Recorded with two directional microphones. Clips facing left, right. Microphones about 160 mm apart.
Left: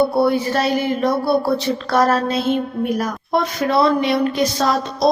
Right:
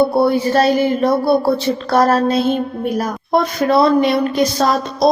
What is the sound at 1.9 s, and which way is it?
Speech, 40° right (ahead or behind).